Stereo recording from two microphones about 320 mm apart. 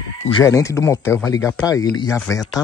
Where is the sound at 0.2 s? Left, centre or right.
Centre.